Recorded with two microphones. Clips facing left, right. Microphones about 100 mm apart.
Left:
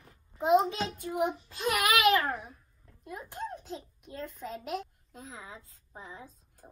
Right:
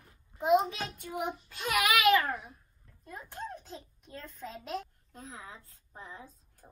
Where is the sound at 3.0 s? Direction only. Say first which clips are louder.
Left 3 dB; 15° left (ahead or behind).